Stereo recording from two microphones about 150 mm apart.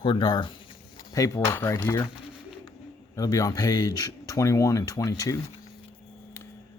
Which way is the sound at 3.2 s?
25° left (ahead or behind).